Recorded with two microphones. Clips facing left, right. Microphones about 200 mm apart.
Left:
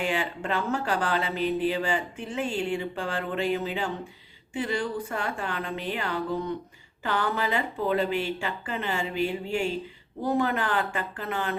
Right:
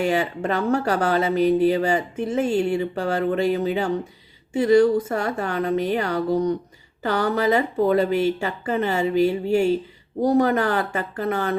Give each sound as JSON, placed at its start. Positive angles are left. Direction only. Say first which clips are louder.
{"t": 0.0, "sound": "speech", "louder": "right 7 dB", "side_deg": -40}